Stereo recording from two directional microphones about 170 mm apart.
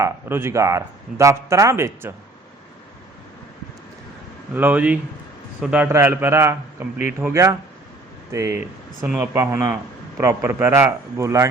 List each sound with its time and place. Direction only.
0.0 s speech: 15° right (ahead or behind)
4.5 s speech: 10° right (ahead or behind)